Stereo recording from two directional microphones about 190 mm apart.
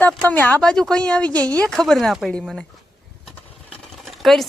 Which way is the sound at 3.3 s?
5° left (ahead or behind).